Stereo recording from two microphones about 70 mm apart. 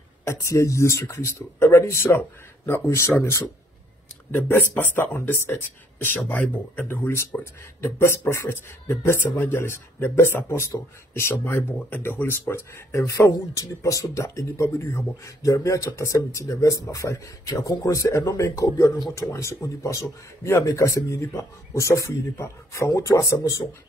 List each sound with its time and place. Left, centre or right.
0.3 s speech: left